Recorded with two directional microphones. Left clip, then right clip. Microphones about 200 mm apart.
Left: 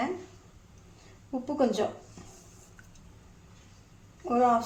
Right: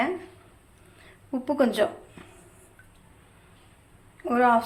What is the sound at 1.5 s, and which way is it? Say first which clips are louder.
Speech: right 4 dB; 5° right (ahead or behind).